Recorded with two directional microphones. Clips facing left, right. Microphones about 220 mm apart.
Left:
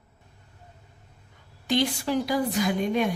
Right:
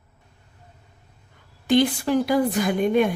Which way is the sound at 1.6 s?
55° right (ahead or behind).